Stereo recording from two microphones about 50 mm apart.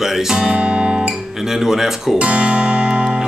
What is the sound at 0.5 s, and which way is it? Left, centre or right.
Guitar, right.